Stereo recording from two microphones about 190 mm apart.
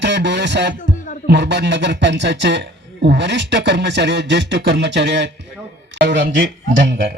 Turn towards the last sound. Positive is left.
turn(degrees=-65)  # may be behind; listen again after turning